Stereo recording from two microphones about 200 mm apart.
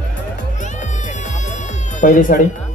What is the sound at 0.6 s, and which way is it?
Music, 40° left (ahead or behind).